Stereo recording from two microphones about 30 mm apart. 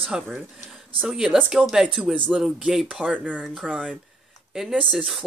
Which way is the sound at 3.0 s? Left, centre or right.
Right.